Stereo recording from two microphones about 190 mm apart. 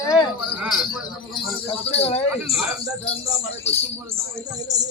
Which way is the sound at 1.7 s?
35° left (ahead or behind).